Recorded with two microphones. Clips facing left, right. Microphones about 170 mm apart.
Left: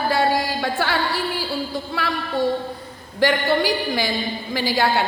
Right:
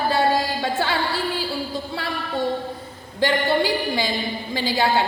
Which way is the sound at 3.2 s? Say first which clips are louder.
Left 1 dB; 20° right (ahead or behind).